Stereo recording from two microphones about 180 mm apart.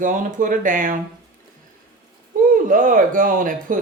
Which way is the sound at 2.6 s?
50° right (ahead or behind).